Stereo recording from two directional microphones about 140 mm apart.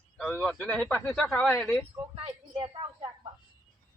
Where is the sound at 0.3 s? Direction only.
10° left (ahead or behind).